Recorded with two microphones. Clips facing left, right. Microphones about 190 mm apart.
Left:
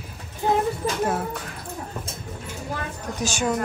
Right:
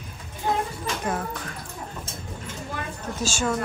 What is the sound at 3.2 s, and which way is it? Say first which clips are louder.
Speech: left 1 dB; 15° left (ahead or behind).